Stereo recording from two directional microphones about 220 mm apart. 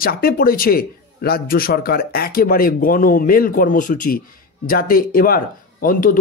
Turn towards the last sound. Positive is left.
turn(degrees=40)  # may be behind; listen again after turning